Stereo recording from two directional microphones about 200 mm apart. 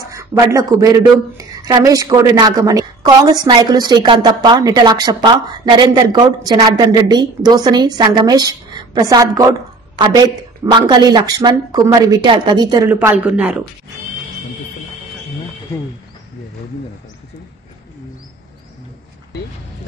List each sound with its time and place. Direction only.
0.1 s a woman's voice: 15° right (ahead or behind)